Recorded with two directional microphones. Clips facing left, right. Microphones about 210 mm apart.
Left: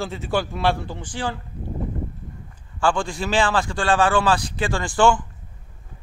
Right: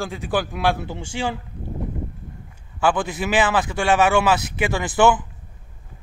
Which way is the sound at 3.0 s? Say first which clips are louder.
Right 1 dB; 20° right (ahead or behind).